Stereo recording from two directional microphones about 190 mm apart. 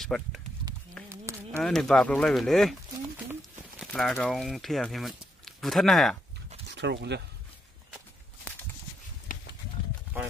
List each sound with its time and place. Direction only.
0.0 s speech: centre (ahead or behind)
1.0 s a sound: 15° right (ahead or behind)
1.6 s speech: 5° left (ahead or behind)
3.8 s speech: centre (ahead or behind)
6.7 s speech: 65° right (ahead or behind)